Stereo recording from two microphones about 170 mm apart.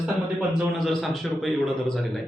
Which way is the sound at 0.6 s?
Centre (ahead or behind).